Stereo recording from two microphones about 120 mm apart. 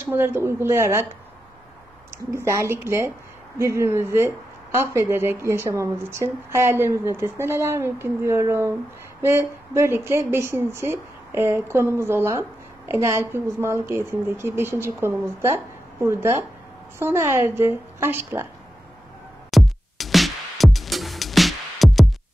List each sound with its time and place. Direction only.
0.0 s speech: 20° right (ahead or behind)
2.3 s speech: 25° right (ahead or behind)
19.5 s music: centre (ahead or behind)